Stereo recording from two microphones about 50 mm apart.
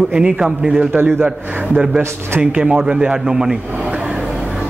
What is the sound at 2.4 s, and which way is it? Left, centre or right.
A man's voice, right.